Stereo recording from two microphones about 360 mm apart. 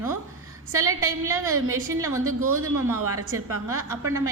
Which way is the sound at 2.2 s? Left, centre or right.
Right.